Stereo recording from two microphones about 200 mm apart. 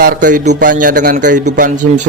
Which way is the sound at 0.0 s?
45° right (ahead or behind).